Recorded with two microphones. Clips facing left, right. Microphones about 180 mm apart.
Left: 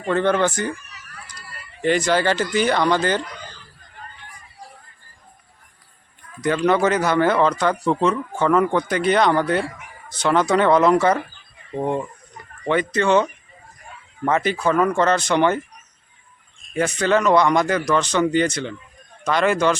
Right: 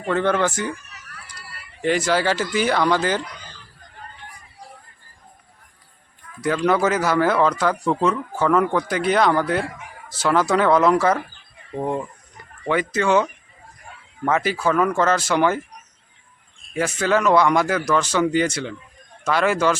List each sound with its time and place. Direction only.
0.0 s speech: 5° right (ahead or behind)
1.8 s speech: 5° right (ahead or behind)
6.4 s speech: 5° right (ahead or behind)
14.3 s speech: 5° right (ahead or behind)
16.7 s speech: 5° right (ahead or behind)